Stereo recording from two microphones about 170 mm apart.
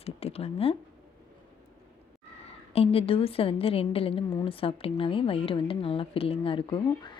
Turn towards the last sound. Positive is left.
turn(degrees=30)  # may be behind; listen again after turning